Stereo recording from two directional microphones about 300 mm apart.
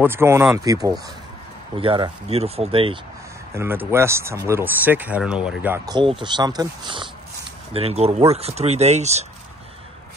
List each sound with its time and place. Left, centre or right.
0.0 s speech: centre
3.5 s speech: centre